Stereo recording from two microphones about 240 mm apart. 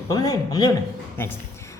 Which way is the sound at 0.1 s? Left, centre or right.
Centre.